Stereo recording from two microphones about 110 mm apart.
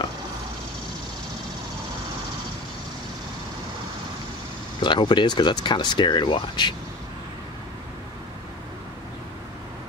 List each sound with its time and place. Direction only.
4.8 s speech: 45° left (ahead or behind)